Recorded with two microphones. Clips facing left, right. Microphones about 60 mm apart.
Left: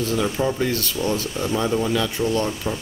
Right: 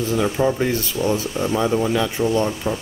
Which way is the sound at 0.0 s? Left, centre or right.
Centre.